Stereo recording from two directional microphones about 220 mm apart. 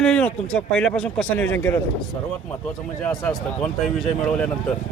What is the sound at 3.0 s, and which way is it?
Speech, centre (ahead or behind).